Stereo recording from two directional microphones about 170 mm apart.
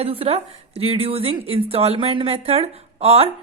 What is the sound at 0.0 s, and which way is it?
Speech, 35° right (ahead or behind).